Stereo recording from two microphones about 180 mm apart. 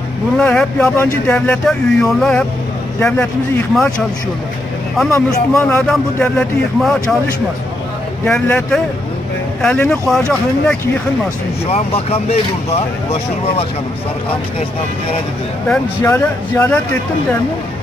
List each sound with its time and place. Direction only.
0.4 s speech: 5° left (ahead or behind)
5.1 s speech: 10° left (ahead or behind)
8.3 s speech: 5° left (ahead or behind)
11.6 s speech: 35° left (ahead or behind)
16.0 s speech: 15° left (ahead or behind)